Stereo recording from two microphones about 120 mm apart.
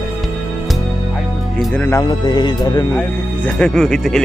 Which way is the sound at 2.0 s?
35° left (ahead or behind).